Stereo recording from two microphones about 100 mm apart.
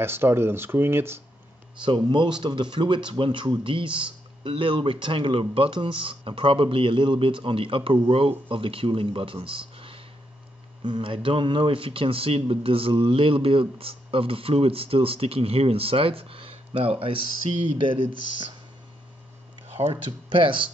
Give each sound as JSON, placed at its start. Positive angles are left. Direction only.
{"t": 0.0, "sound": "speech", "side_deg": -25}
{"t": 1.8, "sound": "a man's voice", "side_deg": -50}
{"t": 19.9, "sound": "speech", "side_deg": -60}